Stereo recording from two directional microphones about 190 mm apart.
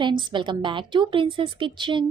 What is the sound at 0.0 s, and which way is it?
A woman's voice, 25° right (ahead or behind).